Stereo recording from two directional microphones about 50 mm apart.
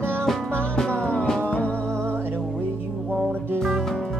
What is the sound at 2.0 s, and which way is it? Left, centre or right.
Music, right.